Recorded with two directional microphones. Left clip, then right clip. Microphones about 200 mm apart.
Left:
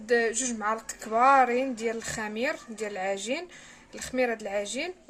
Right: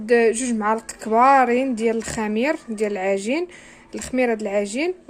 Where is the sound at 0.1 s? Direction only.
40° right (ahead or behind).